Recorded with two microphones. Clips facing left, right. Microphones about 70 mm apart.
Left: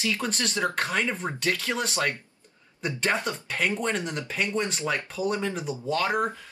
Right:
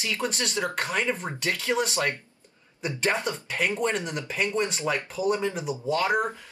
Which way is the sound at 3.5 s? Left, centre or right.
Centre.